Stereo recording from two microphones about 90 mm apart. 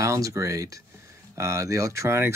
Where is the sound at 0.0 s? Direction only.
35° right (ahead or behind).